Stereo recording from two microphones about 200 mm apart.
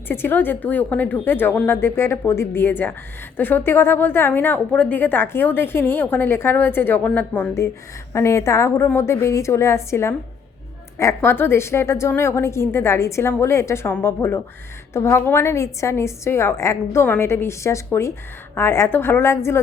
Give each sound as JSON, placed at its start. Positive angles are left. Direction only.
{"t": 0.1, "sound": "a woman's voice", "side_deg": 10}